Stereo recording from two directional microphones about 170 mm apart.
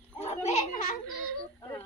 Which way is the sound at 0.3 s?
40° left (ahead or behind).